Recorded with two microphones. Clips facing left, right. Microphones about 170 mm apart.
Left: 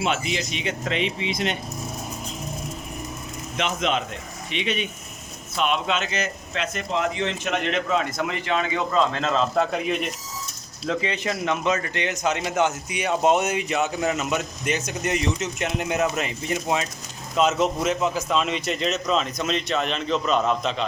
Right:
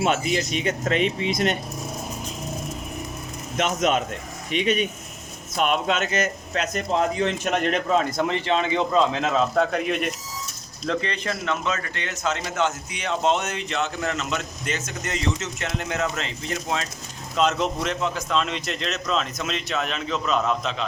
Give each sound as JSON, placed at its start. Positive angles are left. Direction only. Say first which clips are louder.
{"t": 0.0, "sound": "speech", "louder": "right 3 dB", "side_deg": -45}
{"t": 3.6, "sound": "a man's voice", "louder": "right 3 dB", "side_deg": -45}
{"t": 9.1, "sound": "a man's voice", "louder": "right 1 dB", "side_deg": -10}